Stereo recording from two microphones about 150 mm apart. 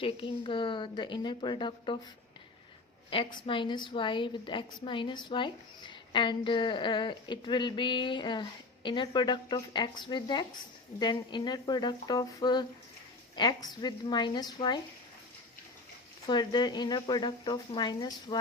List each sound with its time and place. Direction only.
0.0 s a woman's voice: 35° left (ahead or behind)
3.1 s a woman's voice: 35° left (ahead or behind)
16.2 s speech: 30° left (ahead or behind)